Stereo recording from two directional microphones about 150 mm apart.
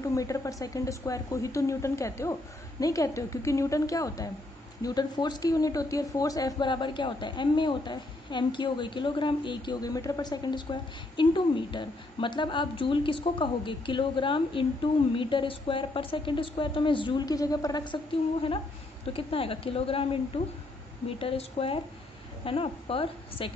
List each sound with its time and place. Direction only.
0.0 s speech: 20° left (ahead or behind); by 20.2 s 40° left (ahead or behind)
21.2 s speech: 40° left (ahead or behind)